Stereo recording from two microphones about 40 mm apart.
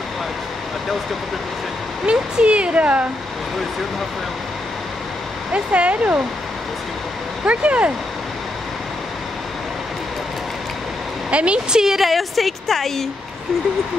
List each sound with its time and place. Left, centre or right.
2.0 s speech: right
5.5 s speech: right
7.4 s speech: right
11.2 s speech: right
11.8 s speech: centre
12.1 s a woman's voice: centre